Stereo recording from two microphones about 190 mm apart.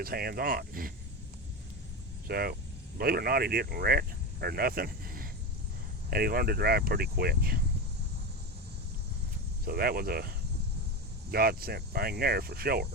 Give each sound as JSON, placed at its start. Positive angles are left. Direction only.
{"t": 0.0, "sound": "speech", "side_deg": -55}
{"t": 2.2, "sound": "speech", "side_deg": -55}
{"t": 9.6, "sound": "speech", "side_deg": -50}